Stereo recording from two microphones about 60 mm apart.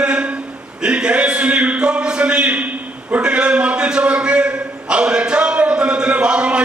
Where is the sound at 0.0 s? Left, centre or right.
Centre.